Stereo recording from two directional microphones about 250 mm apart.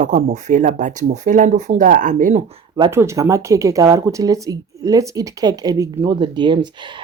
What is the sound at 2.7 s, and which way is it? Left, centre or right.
Speech, centre.